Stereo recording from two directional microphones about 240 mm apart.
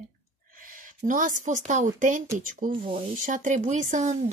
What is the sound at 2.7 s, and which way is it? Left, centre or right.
Speech, right.